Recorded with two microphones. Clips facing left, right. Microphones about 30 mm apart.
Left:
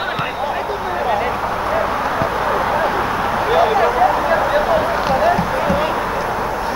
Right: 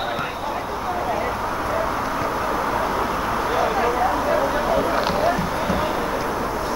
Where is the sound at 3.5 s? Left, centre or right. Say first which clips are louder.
Left 7 dB; left.